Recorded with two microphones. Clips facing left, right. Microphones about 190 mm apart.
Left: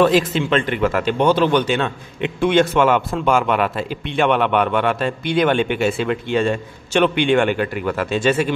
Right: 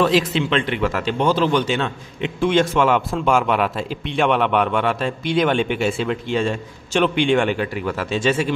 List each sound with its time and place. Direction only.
0.0 s speech: 50° left (ahead or behind)
2.8 s speech: centre (ahead or behind)
6.0 s speech: 60° left (ahead or behind)
7.2 s speech: centre (ahead or behind)
7.5 s speech: 55° left (ahead or behind)